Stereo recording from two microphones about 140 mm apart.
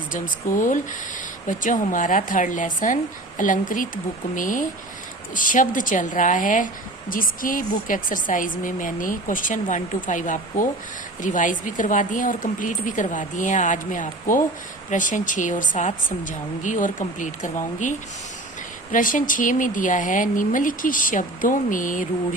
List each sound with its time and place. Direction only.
0.1 s a woman's voice: 70° left (ahead or behind)
7.1 s a woman's voice: 80° left